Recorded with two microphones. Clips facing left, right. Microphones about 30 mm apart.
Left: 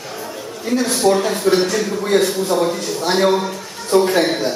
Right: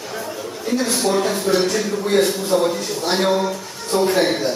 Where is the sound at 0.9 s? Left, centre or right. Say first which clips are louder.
Left 5 dB; centre.